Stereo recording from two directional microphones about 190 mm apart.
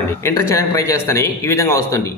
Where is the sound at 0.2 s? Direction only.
15° left (ahead or behind).